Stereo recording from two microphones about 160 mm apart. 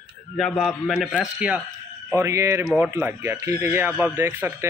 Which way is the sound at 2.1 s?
15° right (ahead or behind).